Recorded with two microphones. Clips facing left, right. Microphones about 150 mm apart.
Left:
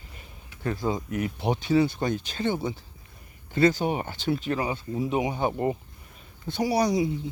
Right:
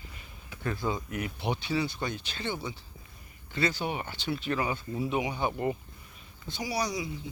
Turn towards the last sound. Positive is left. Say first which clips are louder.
# left 9 dB
turn(degrees=55)  # may be behind; listen again after turning